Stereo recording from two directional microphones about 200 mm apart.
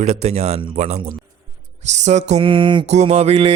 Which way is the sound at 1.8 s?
35° right (ahead or behind).